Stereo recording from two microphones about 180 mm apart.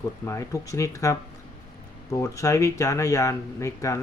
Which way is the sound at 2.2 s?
15° left (ahead or behind).